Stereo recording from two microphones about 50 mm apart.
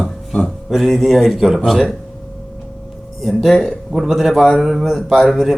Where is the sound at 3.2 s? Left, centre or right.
Centre.